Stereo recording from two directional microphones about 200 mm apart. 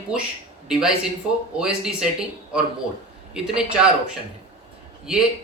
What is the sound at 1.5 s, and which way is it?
Speech, 5° right (ahead or behind).